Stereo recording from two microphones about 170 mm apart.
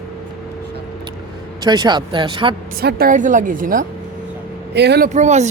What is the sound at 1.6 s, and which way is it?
Speech, 25° right (ahead or behind).